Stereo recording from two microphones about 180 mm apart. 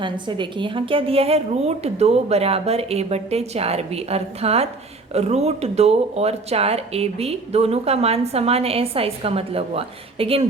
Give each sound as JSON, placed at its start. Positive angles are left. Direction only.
{"t": 0.0, "sound": "speech", "side_deg": -25}